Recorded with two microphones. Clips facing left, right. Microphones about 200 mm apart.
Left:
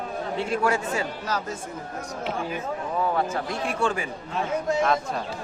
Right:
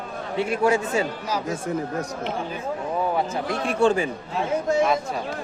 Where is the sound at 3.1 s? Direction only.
15° right (ahead or behind).